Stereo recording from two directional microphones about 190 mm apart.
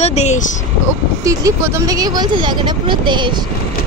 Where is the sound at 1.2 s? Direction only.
15° right (ahead or behind).